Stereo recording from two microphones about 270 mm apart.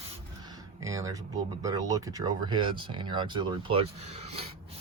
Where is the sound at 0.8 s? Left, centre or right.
Centre.